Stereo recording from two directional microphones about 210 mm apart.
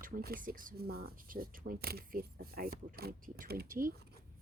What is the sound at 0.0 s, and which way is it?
Speech, 45° right (ahead or behind).